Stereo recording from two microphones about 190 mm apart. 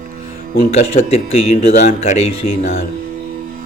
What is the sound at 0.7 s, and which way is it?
Speech, 35° left (ahead or behind).